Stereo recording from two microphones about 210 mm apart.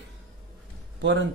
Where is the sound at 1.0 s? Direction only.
60° right (ahead or behind).